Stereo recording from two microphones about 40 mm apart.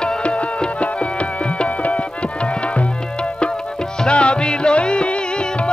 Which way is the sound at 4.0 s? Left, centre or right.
Left.